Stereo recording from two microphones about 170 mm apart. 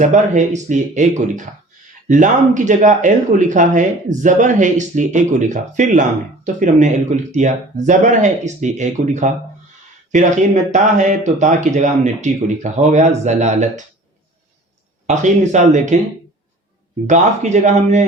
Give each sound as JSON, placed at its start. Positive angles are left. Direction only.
{"t": 0.0, "sound": "speech", "side_deg": -45}
{"t": 15.0, "sound": "speech", "side_deg": -45}
{"t": 17.1, "sound": "speech", "side_deg": -45}